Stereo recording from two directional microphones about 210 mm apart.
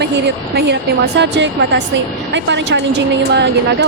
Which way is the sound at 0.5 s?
55° right (ahead or behind).